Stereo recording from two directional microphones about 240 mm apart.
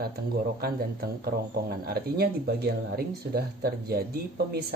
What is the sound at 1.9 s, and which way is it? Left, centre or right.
Speech, right.